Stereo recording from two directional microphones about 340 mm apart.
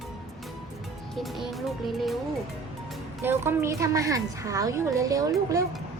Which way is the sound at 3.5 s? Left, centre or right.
Centre.